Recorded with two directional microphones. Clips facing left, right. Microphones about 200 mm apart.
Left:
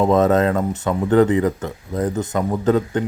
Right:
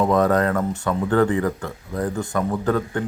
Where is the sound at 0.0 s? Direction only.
25° left (ahead or behind).